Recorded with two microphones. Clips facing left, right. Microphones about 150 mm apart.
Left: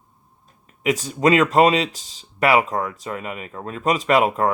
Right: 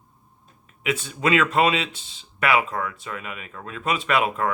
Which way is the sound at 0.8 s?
40° left (ahead or behind).